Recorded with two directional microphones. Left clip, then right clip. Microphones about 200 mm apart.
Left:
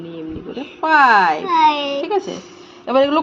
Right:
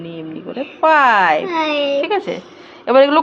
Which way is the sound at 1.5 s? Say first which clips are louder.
Left 3 dB; 15° left (ahead or behind).